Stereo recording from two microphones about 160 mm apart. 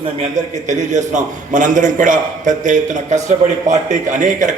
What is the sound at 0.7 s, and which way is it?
A man's voice, 50° right (ahead or behind).